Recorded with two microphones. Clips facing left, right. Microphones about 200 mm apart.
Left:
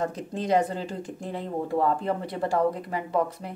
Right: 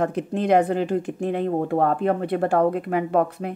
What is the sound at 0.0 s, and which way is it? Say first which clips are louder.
Speech: right 6 dB; 60° right (ahead or behind).